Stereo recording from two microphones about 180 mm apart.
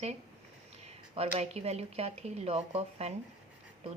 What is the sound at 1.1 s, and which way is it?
Speech, 35° right (ahead or behind).